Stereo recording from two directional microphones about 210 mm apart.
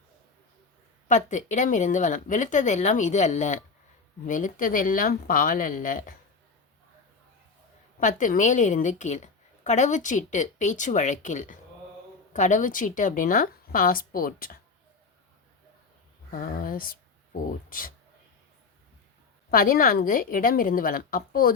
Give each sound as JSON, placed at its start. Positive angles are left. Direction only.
{"t": 1.0, "sound": "a woman's voice", "side_deg": 35}
{"t": 7.9, "sound": "a woman's voice", "side_deg": 40}
{"t": 16.3, "sound": "speech", "side_deg": 40}
{"t": 19.5, "sound": "a woman's voice", "side_deg": 40}